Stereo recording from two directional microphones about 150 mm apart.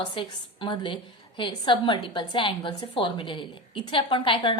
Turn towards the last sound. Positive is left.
turn(degrees=35)  # may be behind; listen again after turning